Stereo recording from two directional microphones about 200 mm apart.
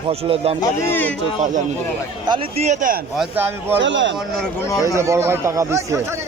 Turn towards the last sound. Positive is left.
turn(degrees=-15)  # may be behind; listen again after turning